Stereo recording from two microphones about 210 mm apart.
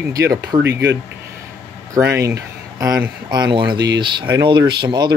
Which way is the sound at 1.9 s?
15° right (ahead or behind).